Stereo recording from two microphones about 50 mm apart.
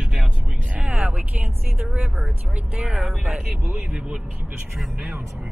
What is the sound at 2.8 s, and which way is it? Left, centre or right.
Speech, right.